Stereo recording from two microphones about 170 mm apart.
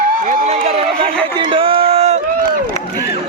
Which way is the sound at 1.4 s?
30° right (ahead or behind).